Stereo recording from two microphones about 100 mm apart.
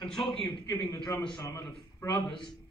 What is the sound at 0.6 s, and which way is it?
A man's voice, 45° left (ahead or behind).